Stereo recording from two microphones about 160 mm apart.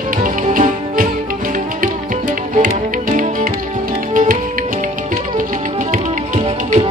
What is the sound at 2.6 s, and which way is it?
Music, 60° right (ahead or behind).